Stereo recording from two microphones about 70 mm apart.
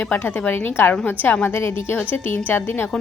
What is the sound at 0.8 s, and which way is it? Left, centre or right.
A woman's voice, left.